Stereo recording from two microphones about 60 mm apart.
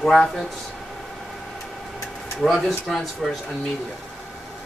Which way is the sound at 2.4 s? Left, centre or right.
Centre.